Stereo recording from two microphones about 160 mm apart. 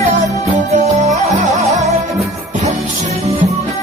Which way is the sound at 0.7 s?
45° right (ahead or behind).